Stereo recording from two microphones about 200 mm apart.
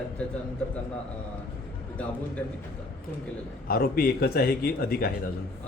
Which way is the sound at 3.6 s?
50° left (ahead or behind).